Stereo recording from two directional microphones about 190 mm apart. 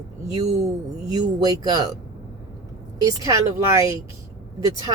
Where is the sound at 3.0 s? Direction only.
15° right (ahead or behind).